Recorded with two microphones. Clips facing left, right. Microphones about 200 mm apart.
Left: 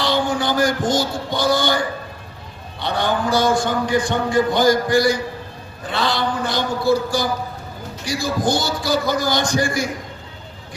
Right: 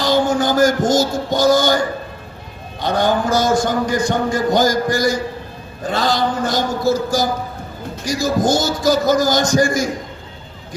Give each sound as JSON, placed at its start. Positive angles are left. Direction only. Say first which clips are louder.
{"t": 0.0, "sound": "music", "louder": "right 4 dB", "side_deg": -45}
{"t": 2.8, "sound": "a man's voice", "louder": "right 4 dB", "side_deg": -45}